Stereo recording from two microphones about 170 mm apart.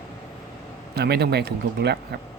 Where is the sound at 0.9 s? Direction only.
70° right (ahead or behind).